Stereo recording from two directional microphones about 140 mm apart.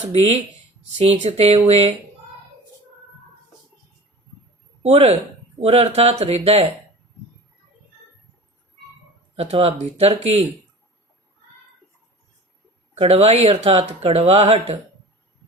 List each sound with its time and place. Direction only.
0.0 s speech: 50° right (ahead or behind)
4.8 s speech: 50° right (ahead or behind)
9.3 s speech: 45° right (ahead or behind)
12.9 s speech: 45° right (ahead or behind)